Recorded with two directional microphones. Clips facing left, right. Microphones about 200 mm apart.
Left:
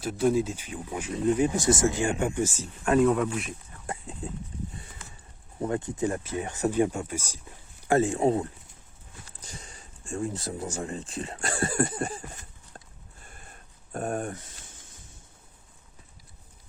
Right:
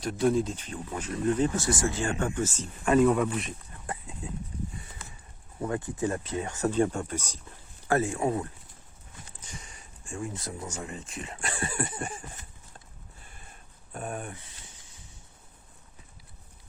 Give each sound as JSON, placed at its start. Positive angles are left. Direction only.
{"t": 0.0, "sound": "speech", "side_deg": 5}
{"t": 2.8, "sound": "speech", "side_deg": 0}
{"t": 3.8, "sound": "speech", "side_deg": 35}
{"t": 5.6, "sound": "speech", "side_deg": 20}
{"t": 7.9, "sound": "speech", "side_deg": 25}
{"t": 13.9, "sound": "a sound", "side_deg": 45}